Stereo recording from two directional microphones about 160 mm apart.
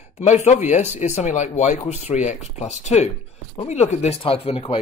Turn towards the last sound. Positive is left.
turn(degrees=35)  # may be behind; listen again after turning